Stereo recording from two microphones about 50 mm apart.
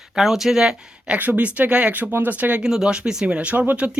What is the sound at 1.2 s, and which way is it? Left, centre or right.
Speech, right.